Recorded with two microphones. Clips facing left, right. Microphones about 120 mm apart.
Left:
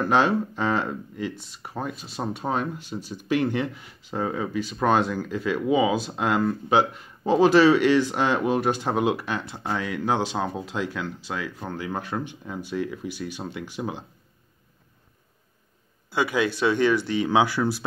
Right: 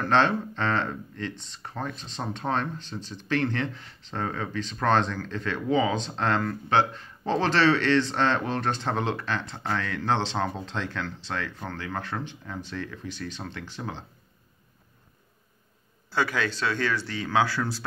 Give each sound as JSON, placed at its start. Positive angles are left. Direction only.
{"t": 0.0, "sound": "speech", "side_deg": 10}
{"t": 16.1, "sound": "speech", "side_deg": 15}